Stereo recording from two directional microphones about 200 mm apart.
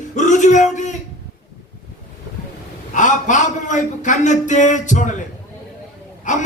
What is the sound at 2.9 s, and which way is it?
A man's voice, 40° left (ahead or behind).